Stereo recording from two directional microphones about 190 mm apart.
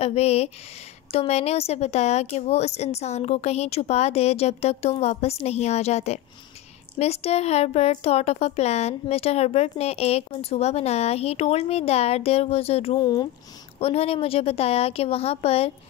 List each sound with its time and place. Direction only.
0.0 s speech: 35° left (ahead or behind)
13.0 s speech: 20° left (ahead or behind)
13.7 s speech: 30° left (ahead or behind)